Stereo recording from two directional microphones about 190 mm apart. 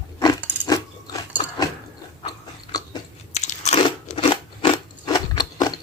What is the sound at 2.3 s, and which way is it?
Biting, 20° left (ahead or behind).